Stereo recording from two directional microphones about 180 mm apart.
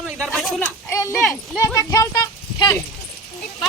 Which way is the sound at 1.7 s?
20° left (ahead or behind).